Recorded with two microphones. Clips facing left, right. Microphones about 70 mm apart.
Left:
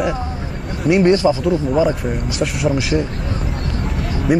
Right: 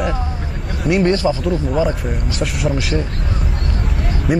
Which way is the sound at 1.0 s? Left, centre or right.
Left.